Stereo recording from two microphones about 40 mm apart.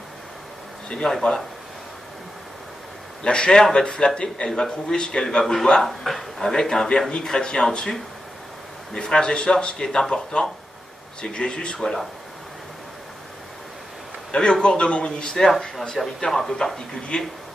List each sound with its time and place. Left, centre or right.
1.0 s speech: centre
3.3 s speech: left
14.3 s speech: left
15.1 s speech: centre